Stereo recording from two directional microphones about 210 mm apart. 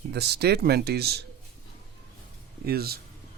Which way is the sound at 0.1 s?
50° right (ahead or behind).